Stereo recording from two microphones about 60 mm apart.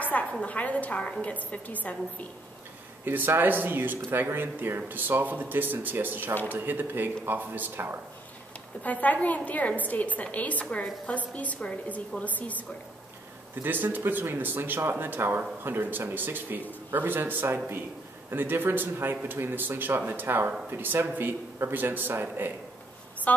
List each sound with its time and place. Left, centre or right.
0.0 s a sound: left
0.3 s a woman's voice: left
3.1 s speech: right
8.8 s a woman's voice: left
13.6 s speech: right
23.3 s a woman's voice: left